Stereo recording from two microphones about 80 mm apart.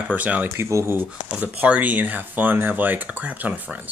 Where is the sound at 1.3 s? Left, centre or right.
Centre.